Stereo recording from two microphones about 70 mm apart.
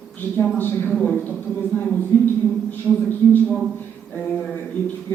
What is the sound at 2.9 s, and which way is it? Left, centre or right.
Speech, centre.